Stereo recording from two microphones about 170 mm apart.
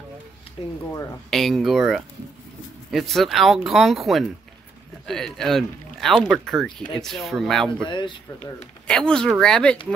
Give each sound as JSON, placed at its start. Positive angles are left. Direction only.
{"t": 0.6, "sound": "speech", "side_deg": 30}
{"t": 1.3, "sound": "speech", "side_deg": 0}
{"t": 7.8, "sound": "speech", "side_deg": 30}
{"t": 8.8, "sound": "speech", "side_deg": 5}